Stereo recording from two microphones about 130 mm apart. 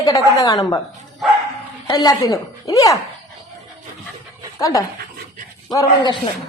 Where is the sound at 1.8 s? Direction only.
30° left (ahead or behind).